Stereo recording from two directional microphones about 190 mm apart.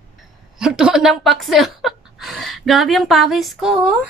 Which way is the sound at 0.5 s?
5° right (ahead or behind).